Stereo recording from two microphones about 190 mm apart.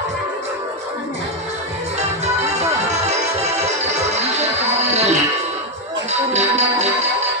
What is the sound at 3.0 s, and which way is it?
Music, 35° right (ahead or behind).